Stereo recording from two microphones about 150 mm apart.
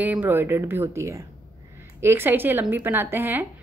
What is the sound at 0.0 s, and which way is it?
A woman's voice, 10° right (ahead or behind).